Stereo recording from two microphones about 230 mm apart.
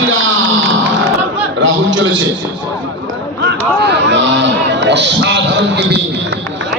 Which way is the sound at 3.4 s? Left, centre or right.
Right.